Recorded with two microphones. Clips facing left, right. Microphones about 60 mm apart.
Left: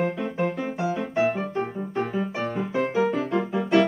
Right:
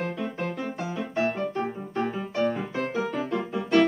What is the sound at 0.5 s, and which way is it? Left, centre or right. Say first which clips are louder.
Piano: left 4 dB; centre.